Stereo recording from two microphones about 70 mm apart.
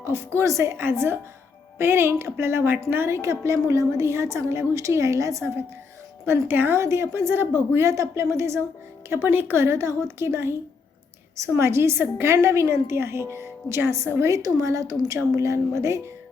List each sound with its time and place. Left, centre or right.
0.3 s a woman's voice: right
6.2 s a woman's voice: right